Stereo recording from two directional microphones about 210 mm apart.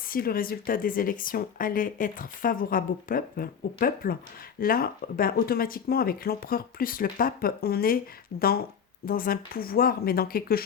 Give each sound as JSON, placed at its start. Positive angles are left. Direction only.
{"t": 0.1, "sound": "speech", "side_deg": 45}